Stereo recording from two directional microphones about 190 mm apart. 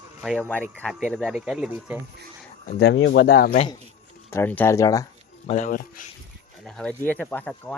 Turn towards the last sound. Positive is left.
turn(degrees=10)  # may be behind; listen again after turning